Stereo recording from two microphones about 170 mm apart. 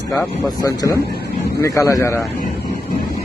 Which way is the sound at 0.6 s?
20° left (ahead or behind).